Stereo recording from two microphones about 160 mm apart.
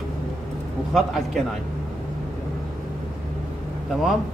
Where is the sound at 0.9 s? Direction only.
Centre (ahead or behind).